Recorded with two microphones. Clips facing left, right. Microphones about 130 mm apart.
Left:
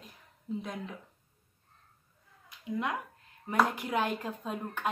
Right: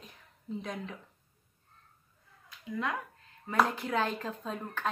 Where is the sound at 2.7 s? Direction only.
20° left (ahead or behind).